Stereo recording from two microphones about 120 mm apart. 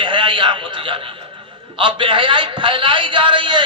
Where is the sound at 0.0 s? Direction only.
45° right (ahead or behind).